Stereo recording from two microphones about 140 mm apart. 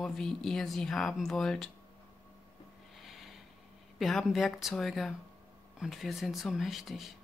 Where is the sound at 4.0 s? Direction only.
Centre (ahead or behind).